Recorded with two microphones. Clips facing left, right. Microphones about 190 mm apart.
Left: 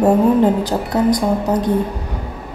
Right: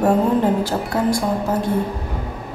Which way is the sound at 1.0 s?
20° left (ahead or behind).